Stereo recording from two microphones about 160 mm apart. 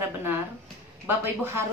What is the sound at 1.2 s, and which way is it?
Speech, 15° right (ahead or behind).